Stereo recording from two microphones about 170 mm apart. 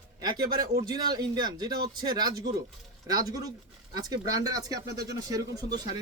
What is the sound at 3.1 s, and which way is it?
Speech, 20° right (ahead or behind).